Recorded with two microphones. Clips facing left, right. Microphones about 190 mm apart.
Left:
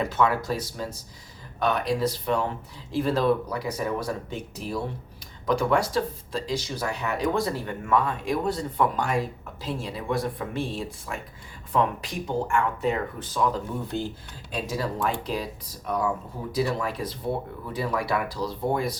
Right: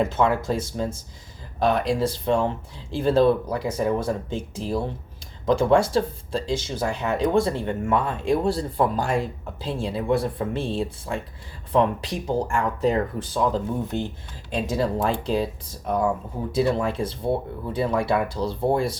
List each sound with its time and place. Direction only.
0.1 s speech: 25° right (ahead or behind)
16.5 s speech: 25° right (ahead or behind)